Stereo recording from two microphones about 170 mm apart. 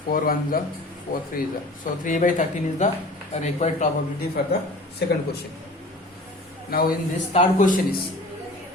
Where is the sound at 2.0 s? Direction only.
50° left (ahead or behind).